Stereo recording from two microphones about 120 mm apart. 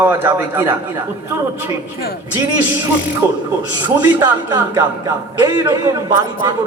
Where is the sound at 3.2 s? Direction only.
20° right (ahead or behind).